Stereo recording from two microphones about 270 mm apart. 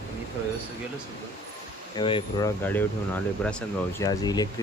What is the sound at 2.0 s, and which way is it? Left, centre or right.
Speech, centre.